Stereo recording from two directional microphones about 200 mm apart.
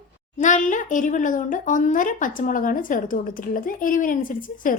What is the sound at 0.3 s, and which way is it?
Speech, 40° left (ahead or behind).